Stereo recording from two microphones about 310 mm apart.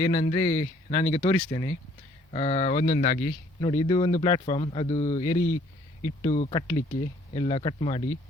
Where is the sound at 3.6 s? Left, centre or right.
Centre.